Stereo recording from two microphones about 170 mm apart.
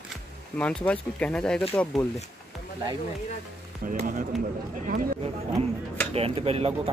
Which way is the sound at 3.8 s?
50° right (ahead or behind).